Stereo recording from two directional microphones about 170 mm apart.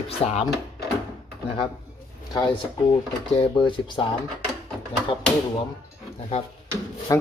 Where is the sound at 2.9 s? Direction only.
30° left (ahead or behind).